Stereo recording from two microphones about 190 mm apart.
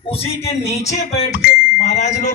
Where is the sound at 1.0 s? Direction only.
50° left (ahead or behind).